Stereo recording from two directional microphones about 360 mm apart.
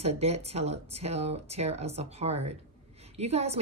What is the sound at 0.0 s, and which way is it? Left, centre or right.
Speech, centre.